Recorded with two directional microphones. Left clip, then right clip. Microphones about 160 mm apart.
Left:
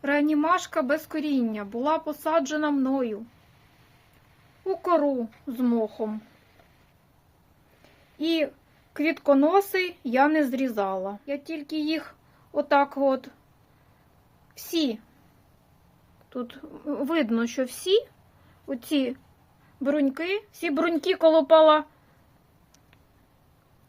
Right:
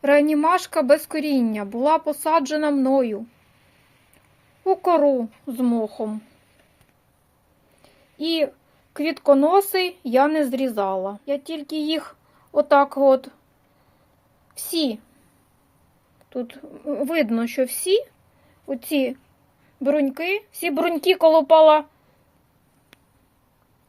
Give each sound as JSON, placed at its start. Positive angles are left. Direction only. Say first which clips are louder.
{"t": 0.0, "sound": "speech", "louder": "right 7 dB", "side_deg": -35}
{"t": 4.7, "sound": "a child's voice", "louder": "right 6 dB", "side_deg": -25}
{"t": 8.2, "sound": "a child's voice", "louder": "right 3 dB", "side_deg": -10}
{"t": 11.3, "sound": "a child's voice", "louder": "right 6 dB", "side_deg": -25}
{"t": 14.5, "sound": "a child's voice", "louder": "right 3 dB", "side_deg": -10}
{"t": 16.3, "sound": "a woman's voice", "louder": "right 5 dB", "side_deg": 0}